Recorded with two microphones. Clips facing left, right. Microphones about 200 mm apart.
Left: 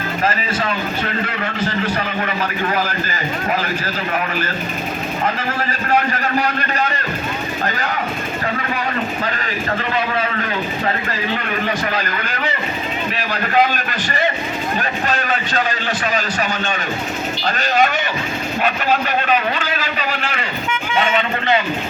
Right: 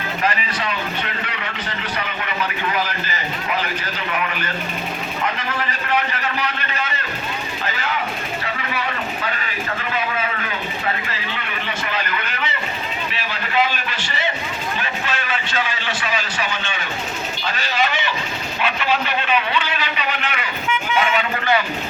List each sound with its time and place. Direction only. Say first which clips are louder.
0.3 s a man's voice: left 3 dB; 45° left (ahead or behind)
5.2 s a man's voice: left 3 dB; 40° left (ahead or behind)
11.9 s a man's voice: left 3 dB; 40° left (ahead or behind)
20.1 s speech: left 2 dB; 30° left (ahead or behind)